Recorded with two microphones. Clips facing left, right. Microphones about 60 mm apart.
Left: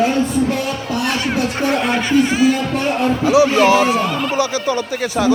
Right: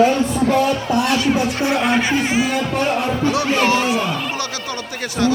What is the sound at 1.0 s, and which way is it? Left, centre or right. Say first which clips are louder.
Music: right 1 dB; left.